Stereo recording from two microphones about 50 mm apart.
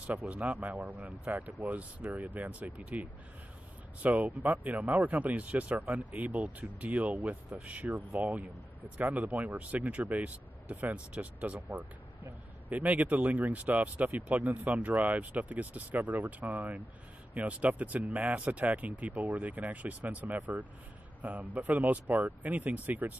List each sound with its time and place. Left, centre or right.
0.3 s speech: right